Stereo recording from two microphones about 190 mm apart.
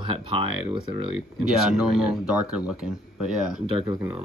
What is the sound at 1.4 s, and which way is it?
Speech, 5° right (ahead or behind).